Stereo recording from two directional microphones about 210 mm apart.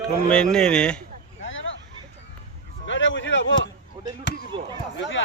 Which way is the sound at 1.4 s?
65° left (ahead or behind).